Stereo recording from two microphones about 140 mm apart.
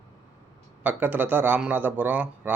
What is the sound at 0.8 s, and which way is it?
Speech, 15° right (ahead or behind).